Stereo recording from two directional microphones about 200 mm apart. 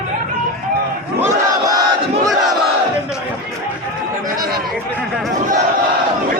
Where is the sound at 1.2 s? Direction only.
15° right (ahead or behind).